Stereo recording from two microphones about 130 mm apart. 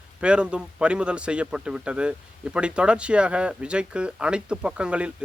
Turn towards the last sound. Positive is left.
turn(degrees=-10)  # may be behind; listen again after turning